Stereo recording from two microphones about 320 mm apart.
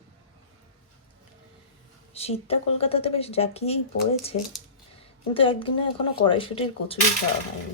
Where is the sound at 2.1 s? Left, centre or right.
Centre.